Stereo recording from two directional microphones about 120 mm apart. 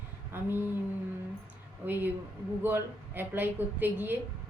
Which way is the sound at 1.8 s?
15° right (ahead or behind).